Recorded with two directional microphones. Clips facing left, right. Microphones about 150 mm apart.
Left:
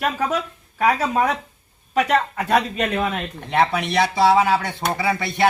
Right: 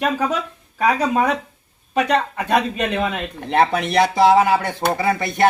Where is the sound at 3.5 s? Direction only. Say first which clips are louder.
Right 2 dB; 50° right (ahead or behind).